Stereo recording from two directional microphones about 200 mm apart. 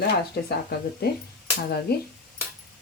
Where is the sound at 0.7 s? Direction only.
55° left (ahead or behind).